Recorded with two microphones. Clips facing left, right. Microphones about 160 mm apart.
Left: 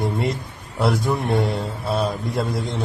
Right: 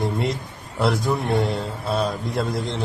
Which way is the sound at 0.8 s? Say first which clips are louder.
Left 1 dB; centre (ahead or behind).